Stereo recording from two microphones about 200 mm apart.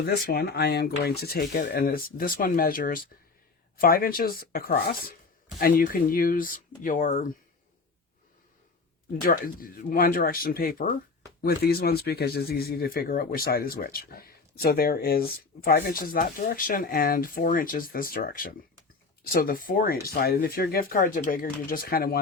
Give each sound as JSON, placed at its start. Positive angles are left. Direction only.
{"t": 0.3, "sound": "speech", "side_deg": 50}
{"t": 9.2, "sound": "speech", "side_deg": 45}